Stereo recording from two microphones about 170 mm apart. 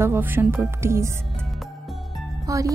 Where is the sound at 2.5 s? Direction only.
20° right (ahead or behind).